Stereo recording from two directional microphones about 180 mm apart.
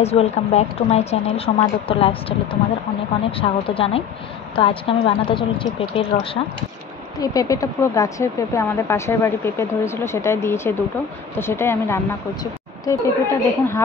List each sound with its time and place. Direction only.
0.0 s a woman's voice: 35° left (ahead or behind)
7.2 s speech: 20° left (ahead or behind)